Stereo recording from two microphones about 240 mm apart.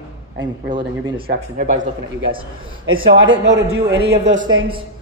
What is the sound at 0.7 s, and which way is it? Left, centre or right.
Speech, right.